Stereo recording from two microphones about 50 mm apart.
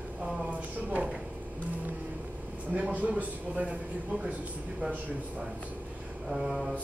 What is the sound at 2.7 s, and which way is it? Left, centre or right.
A man's voice, right.